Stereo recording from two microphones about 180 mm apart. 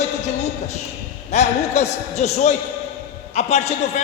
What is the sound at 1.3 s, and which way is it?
A man's voice, 40° left (ahead or behind).